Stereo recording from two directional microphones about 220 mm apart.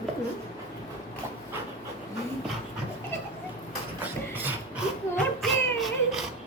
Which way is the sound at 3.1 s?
10° left (ahead or behind).